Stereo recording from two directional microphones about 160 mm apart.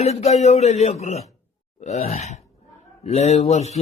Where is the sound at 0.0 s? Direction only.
40° left (ahead or behind).